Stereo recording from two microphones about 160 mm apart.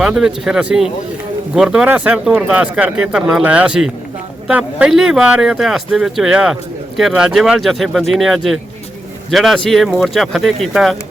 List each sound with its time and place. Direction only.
0.0 s speech: 5° right (ahead or behind)